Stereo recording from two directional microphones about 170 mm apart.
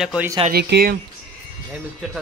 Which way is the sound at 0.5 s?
70° right (ahead or behind).